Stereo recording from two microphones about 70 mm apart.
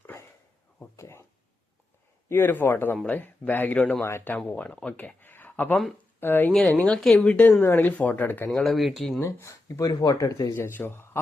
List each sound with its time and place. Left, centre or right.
0.9 s a sound: left
2.3 s speech: left
4.0 s speech: left
4.4 s speech: left
4.9 s a sound: left
6.1 s speech: left
6.5 s speech: centre
7.3 s speech: centre
7.6 s speech: left
8.6 s speech: centre
9.2 s speech: left
10.2 s speech: left
10.5 s speech: left